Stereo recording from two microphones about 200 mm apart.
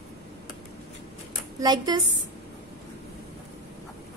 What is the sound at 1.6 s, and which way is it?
Speech, 20° right (ahead or behind).